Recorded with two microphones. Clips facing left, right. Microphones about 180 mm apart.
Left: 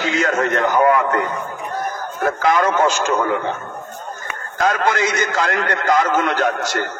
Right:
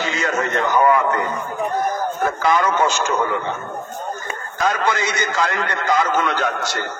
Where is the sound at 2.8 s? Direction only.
45° left (ahead or behind).